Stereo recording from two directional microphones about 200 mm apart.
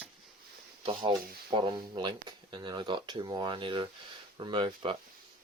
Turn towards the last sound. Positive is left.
turn(degrees=-25)  # may be behind; listen again after turning